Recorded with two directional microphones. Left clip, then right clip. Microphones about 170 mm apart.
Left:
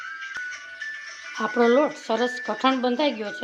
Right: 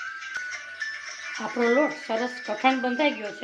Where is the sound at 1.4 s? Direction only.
40° left (ahead or behind).